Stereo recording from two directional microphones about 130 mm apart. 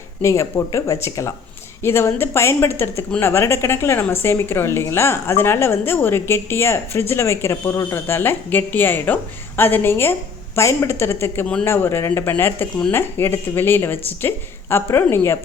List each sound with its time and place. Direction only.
0.2 s a woman's voice: 20° left (ahead or behind)